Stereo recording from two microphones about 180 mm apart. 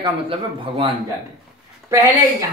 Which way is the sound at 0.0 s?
30° right (ahead or behind).